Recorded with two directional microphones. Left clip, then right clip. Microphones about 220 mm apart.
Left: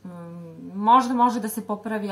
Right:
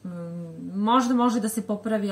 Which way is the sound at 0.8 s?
Centre (ahead or behind).